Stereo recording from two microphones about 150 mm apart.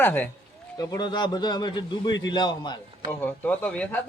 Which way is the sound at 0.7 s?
30° left (ahead or behind).